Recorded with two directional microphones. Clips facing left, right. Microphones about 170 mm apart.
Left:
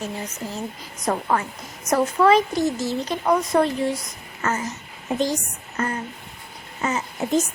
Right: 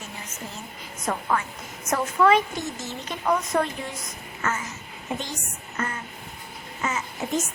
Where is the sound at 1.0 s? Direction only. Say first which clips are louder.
Left 4 dB; 35° left (ahead or behind).